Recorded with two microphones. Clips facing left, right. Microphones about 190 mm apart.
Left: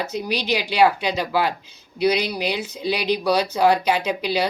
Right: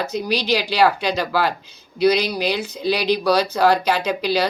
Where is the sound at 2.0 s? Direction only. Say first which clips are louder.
Right 3 dB; 70° right (ahead or behind).